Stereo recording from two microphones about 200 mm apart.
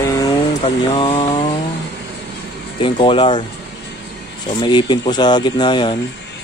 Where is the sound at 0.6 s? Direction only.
25° left (ahead or behind).